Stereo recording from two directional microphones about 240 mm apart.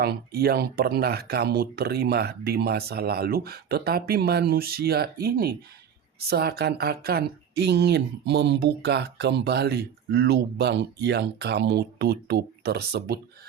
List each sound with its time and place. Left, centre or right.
0.0 s speech: right